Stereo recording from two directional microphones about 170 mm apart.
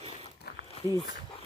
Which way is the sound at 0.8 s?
35° left (ahead or behind).